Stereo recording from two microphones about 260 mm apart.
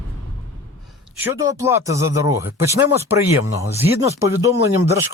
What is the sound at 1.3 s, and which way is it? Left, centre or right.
Speech, centre.